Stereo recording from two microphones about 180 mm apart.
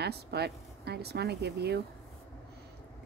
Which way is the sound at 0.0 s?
65° right (ahead or behind).